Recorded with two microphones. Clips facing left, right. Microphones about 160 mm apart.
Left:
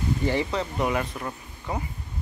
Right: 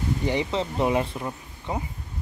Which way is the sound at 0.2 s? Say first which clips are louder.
Right 1 dB; 15° right (ahead or behind).